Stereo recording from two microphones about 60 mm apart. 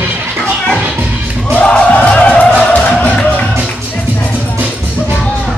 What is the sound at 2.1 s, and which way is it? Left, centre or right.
Music, left.